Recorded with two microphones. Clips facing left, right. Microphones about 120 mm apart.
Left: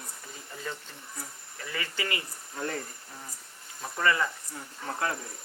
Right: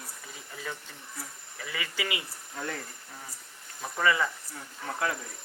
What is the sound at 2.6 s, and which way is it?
Speech, 35° left (ahead or behind).